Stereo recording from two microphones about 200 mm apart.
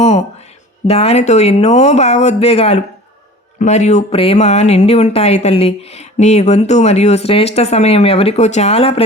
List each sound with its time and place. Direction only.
0.9 s speech: 30° left (ahead or behind)